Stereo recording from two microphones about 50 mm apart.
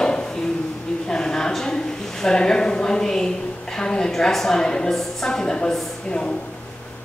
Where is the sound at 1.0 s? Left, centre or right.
Centre.